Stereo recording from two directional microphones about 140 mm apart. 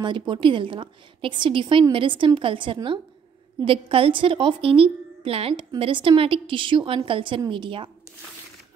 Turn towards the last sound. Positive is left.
turn(degrees=-35)  # may be behind; listen again after turning